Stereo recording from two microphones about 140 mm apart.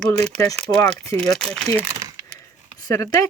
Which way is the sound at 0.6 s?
5° left (ahead or behind).